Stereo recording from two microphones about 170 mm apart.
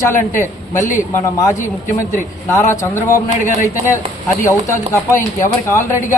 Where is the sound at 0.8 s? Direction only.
15° left (ahead or behind).